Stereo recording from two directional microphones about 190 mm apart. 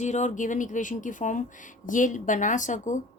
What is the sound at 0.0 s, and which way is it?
Speech, 40° left (ahead or behind).